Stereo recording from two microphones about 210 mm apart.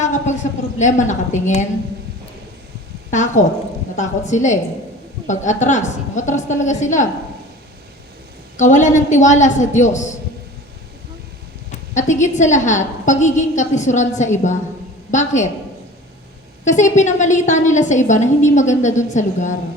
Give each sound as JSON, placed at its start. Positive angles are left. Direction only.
{"t": 0.0, "sound": "a sound", "side_deg": 35}
{"t": 0.8, "sound": "a woman's voice", "side_deg": 35}
{"t": 3.1, "sound": "a woman's voice", "side_deg": 35}
{"t": 8.5, "sound": "a woman's voice", "side_deg": 35}
{"t": 11.7, "sound": "a sound", "side_deg": 35}
{"t": 12.2, "sound": "a woman's voice", "side_deg": 35}
{"t": 16.6, "sound": "a woman's voice", "side_deg": 35}